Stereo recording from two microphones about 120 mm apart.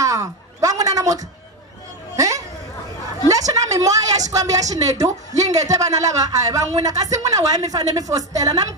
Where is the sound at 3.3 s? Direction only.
30° right (ahead or behind).